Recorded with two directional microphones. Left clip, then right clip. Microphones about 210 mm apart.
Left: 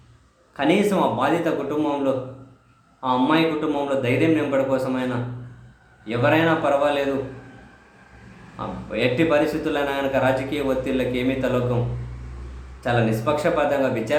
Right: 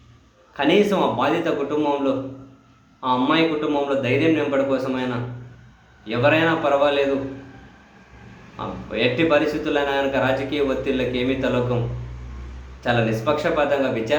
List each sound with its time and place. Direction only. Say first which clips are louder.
0.5 s a man's voice: right 2 dB; 5° left (ahead or behind)
6.1 s a man's voice: right 1 dB; 10° left (ahead or behind)
8.5 s a man's voice: right 1 dB; 5° left (ahead or behind)
12.8 s a man's voice: right 1 dB; 5° left (ahead or behind)